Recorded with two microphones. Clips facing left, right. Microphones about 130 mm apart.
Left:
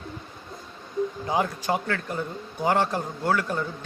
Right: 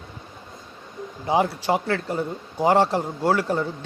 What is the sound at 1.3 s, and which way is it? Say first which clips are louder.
A man's voice: right 7 dB; 25° right (ahead or behind).